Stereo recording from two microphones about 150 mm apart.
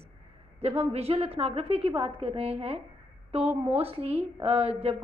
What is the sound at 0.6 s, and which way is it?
A woman's voice, 45° right (ahead or behind).